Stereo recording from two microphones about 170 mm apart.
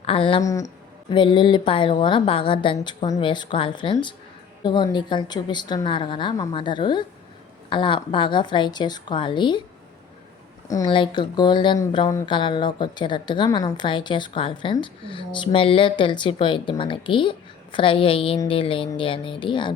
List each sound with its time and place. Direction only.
0.0 s speech: 35° left (ahead or behind)
0.4 s a woman's voice: 20° left (ahead or behind)
10.7 s a woman's voice: 25° left (ahead or behind)